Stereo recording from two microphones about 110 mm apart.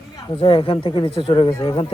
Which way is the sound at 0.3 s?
55° left (ahead or behind).